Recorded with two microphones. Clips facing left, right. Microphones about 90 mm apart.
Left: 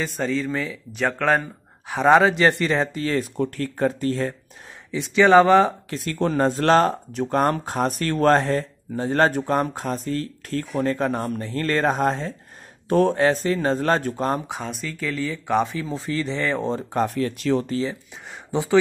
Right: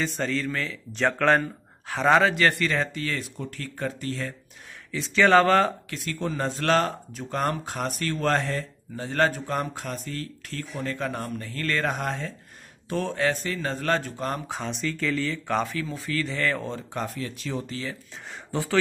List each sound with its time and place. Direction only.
0.0 s speech: 10° left (ahead or behind)
1.9 s speech: 15° left (ahead or behind)
3.3 s speech: 45° left (ahead or behind)
4.9 s speech: 15° left (ahead or behind)
5.9 s speech: 35° left (ahead or behind)
7.1 s speech: 50° left (ahead or behind); by 9.3 s 35° left (ahead or behind)
9.3 s speech: 45° left (ahead or behind); by 12.4 s 30° left (ahead or behind)
12.8 s speech: 45° left (ahead or behind)
13.1 s speech: 35° left (ahead or behind)
14.6 s speech: 5° left (ahead or behind)
15.6 s speech: 25° left (ahead or behind)
16.6 s speech: 35° left (ahead or behind)
17.0 s speech: 60° left (ahead or behind)
18.5 s speech: 20° left (ahead or behind)